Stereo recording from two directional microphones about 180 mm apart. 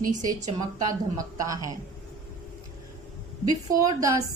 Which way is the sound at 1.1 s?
20° right (ahead or behind).